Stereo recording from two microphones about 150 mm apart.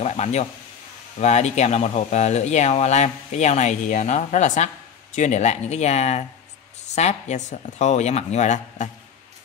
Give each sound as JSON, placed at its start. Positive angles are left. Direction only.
{"t": 0.0, "sound": "speech", "side_deg": 50}